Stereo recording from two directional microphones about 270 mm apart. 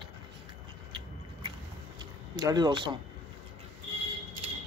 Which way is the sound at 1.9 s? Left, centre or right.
Centre.